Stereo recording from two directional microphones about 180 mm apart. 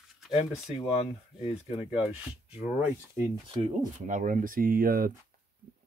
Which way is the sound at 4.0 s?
45° right (ahead or behind).